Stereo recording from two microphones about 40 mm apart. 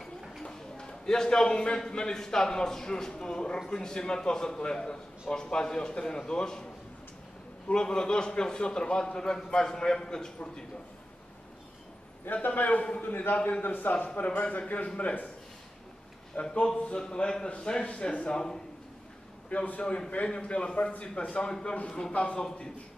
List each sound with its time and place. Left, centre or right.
0.4 s a sound: centre
1.9 s a man's voice: left
12.3 s a man's voice: left
13.0 s a man's voice: left
16.3 s a man's voice: left
16.7 s a man's voice: left
19.5 s a man's voice: left
20.1 s a man's voice: left